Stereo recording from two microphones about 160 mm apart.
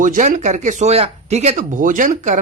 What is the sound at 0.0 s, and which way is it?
Speech, 50° right (ahead or behind).